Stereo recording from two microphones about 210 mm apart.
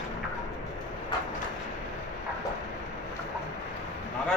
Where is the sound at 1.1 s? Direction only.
20° left (ahead or behind).